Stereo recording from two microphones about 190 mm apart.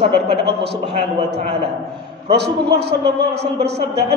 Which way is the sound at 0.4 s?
60° right (ahead or behind).